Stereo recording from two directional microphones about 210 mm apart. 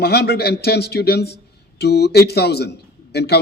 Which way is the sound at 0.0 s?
50° left (ahead or behind).